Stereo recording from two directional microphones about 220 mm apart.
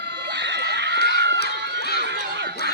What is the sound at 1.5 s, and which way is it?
Run, 50° right (ahead or behind).